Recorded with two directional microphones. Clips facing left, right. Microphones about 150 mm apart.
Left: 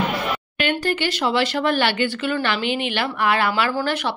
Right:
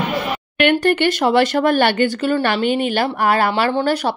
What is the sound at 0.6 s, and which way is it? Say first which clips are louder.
Speech: right 8 dB; 60° right (ahead or behind).